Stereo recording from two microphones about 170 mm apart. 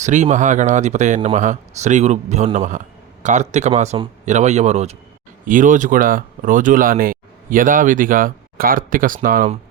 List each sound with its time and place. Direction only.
0.0 s speech: 45° right (ahead or behind)
5.5 s speech: 50° right (ahead or behind)